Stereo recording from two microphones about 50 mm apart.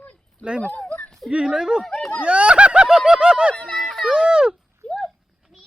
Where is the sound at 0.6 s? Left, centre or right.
Left.